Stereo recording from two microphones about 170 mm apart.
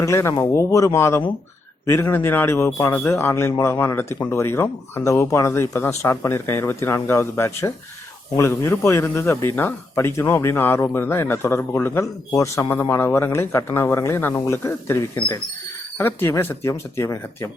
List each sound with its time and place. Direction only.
0.0 s speech: 15° left (ahead or behind)